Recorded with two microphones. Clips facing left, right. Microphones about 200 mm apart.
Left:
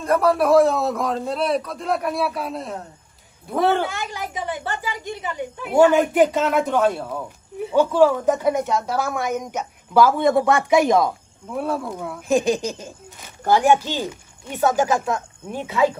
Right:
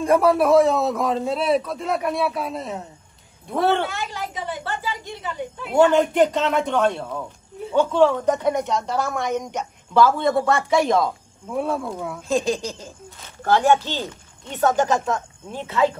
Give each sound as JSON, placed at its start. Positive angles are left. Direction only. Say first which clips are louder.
{"t": 0.0, "sound": "a man's voice", "louder": "right 2 dB", "side_deg": -10}
{"t": 0.3, "sound": "a man's voice", "louder": "left 2 dB", "side_deg": 0}
{"t": 3.9, "sound": "a woman's voice", "louder": "left 1 dB", "side_deg": 15}
{"t": 10.0, "sound": "a woman's voice", "louder": "left 2 dB", "side_deg": 15}
{"t": 11.4, "sound": "a man's voice", "louder": "right 1 dB", "side_deg": 0}
{"t": 12.2, "sound": "a woman's voice", "louder": "left 3 dB", "side_deg": 15}